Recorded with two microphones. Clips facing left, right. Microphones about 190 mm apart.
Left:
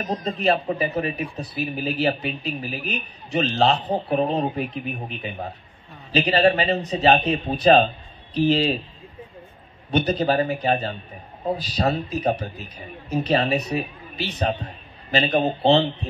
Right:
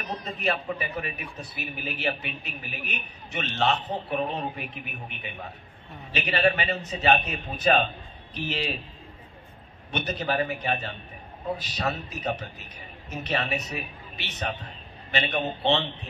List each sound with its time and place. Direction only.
0.0 s speech: 40° left (ahead or behind)
9.8 s speech: 35° left (ahead or behind)